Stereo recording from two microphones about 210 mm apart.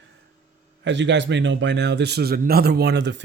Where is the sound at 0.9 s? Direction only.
60° right (ahead or behind).